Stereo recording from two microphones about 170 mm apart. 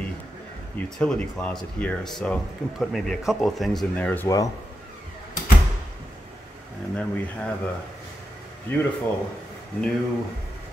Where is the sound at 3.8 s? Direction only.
10° left (ahead or behind).